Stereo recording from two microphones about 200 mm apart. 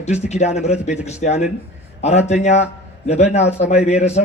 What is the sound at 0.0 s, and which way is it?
A man's voice, 35° left (ahead or behind).